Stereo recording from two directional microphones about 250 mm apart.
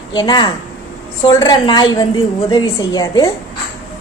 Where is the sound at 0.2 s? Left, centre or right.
Centre.